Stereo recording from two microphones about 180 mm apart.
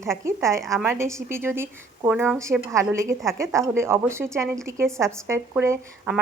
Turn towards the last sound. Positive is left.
turn(degrees=-10)  # may be behind; listen again after turning